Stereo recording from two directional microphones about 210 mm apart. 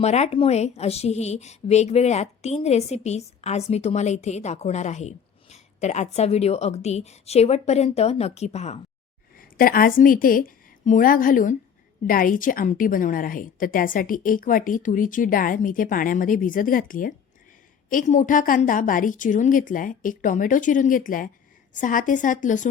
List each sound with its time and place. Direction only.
0.0 s a woman's voice: 30° left (ahead or behind)
9.4 s a woman's voice: 45° left (ahead or behind)